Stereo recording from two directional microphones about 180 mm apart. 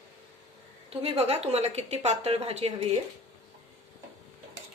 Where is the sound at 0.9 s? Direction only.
35° right (ahead or behind).